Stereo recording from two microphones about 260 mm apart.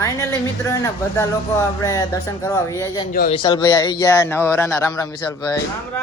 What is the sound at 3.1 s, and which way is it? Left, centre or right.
Speech, left.